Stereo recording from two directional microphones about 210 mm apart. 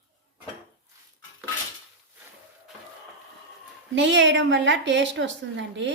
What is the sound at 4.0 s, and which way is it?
A woman's voice, 60° right (ahead or behind).